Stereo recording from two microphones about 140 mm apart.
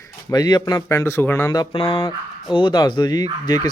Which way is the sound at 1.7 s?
40° left (ahead or behind).